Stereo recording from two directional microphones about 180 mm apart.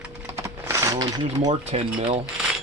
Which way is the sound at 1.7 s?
35° right (ahead or behind).